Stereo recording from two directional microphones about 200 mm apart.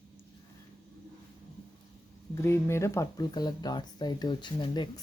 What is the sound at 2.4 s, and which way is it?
Speech, 15° left (ahead or behind).